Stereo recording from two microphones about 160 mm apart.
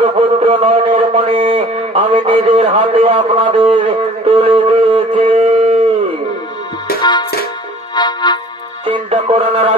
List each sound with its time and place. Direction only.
0.0 s a sound: 35° right (ahead or behind)
2.5 s a man's voice: 40° right (ahead or behind)
3.8 s music: 40° right (ahead or behind)
7.0 s music: 25° left (ahead or behind)
8.8 s music: 35° right (ahead or behind)